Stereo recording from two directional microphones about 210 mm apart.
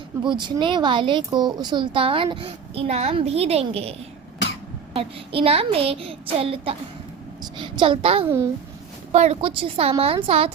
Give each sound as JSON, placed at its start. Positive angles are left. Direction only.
{"t": 0.3, "sound": "speech", "side_deg": -20}
{"t": 4.9, "sound": "a woman's voice", "side_deg": -25}